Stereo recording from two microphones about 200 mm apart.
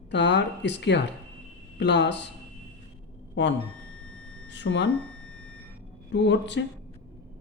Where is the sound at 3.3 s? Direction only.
65° left (ahead or behind).